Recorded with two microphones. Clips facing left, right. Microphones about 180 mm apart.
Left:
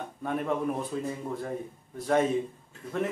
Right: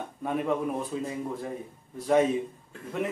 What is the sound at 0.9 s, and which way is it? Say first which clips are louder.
Speech: even; 10° right (ahead or behind).